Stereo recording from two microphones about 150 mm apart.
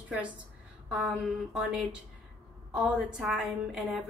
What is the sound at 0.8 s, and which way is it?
Speech, 10° right (ahead or behind).